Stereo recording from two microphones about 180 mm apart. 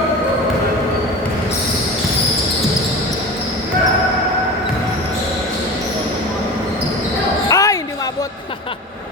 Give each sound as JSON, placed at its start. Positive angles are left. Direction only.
{"t": 7.4, "sound": "basketball bounce", "side_deg": 20}